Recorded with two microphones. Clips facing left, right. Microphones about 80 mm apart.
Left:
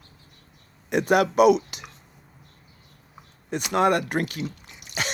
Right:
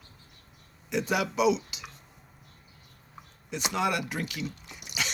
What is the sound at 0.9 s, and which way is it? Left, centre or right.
Speech, left.